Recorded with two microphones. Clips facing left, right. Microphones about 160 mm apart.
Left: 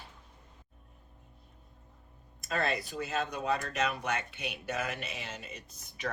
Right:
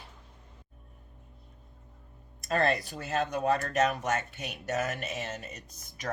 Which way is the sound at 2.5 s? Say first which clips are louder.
Right 5 dB; 45° right (ahead or behind).